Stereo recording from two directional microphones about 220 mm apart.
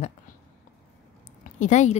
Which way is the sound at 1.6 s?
30° left (ahead or behind).